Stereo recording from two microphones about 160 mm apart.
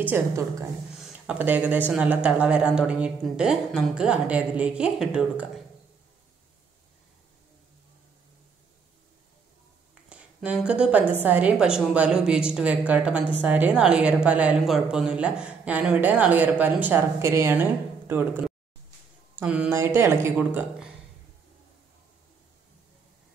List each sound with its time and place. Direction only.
0.0 s a woman's voice: 15° right (ahead or behind)
0.9 s a woman's voice: 5° right (ahead or behind)
10.0 s a woman's voice: 5° right (ahead or behind)